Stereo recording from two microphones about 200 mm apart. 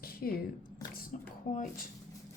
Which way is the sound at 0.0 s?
50° left (ahead or behind).